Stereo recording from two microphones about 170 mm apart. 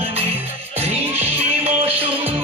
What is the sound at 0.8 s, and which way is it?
Music, 40° right (ahead or behind).